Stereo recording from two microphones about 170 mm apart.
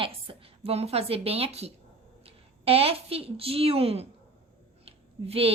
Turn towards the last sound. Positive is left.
turn(degrees=-35)  # may be behind; listen again after turning